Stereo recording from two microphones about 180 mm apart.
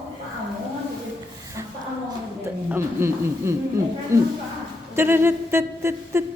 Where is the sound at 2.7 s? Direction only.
15° right (ahead or behind).